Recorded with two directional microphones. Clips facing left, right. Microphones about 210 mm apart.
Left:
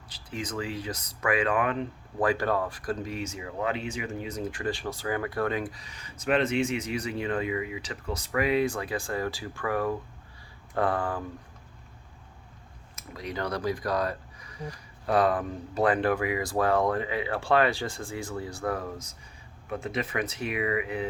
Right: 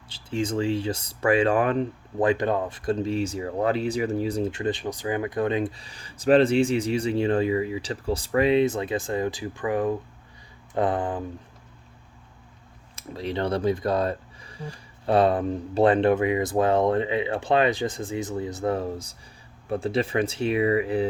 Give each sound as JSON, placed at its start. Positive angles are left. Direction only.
{"t": 0.1, "sound": "speech", "side_deg": -25}
{"t": 2.1, "sound": "speech", "side_deg": -20}
{"t": 13.0, "sound": "speech", "side_deg": -30}